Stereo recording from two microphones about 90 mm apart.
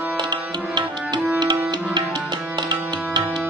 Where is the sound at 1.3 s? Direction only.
55° right (ahead or behind).